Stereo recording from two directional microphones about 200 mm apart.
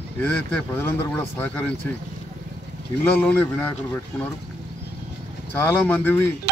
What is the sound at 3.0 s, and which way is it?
Speech, 10° left (ahead or behind).